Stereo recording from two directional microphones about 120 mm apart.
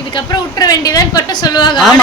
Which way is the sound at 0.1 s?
35° left (ahead or behind).